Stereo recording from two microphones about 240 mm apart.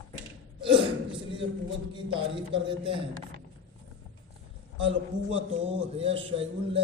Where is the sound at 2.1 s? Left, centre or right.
Right.